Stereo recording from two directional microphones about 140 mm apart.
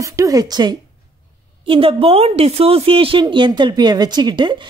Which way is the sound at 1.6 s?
40° right (ahead or behind).